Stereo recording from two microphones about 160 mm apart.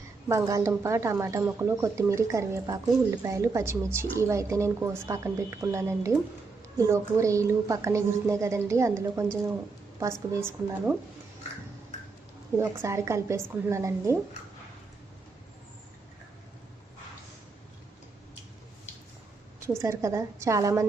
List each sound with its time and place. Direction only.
0.3 s a woman's voice: 20° right (ahead or behind)
12.5 s a woman's voice: 15° right (ahead or behind)
19.8 s a woman's voice: 20° right (ahead or behind)